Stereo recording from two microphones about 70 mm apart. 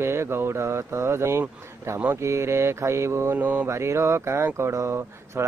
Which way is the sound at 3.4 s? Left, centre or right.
Right.